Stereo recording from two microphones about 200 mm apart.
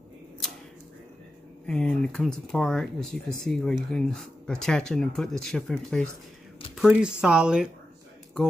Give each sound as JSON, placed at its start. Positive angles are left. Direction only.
{"t": 1.7, "sound": "speech", "side_deg": 5}